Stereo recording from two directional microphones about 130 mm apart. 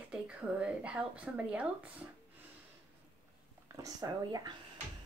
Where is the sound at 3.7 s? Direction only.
25° right (ahead or behind).